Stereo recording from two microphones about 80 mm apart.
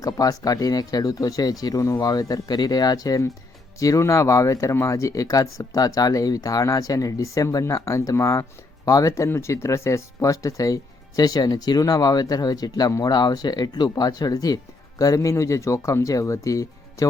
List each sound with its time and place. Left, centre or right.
0.0 s speech: left